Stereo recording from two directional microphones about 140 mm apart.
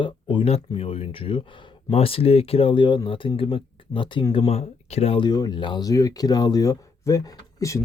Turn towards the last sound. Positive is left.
turn(degrees=25)  # may be behind; listen again after turning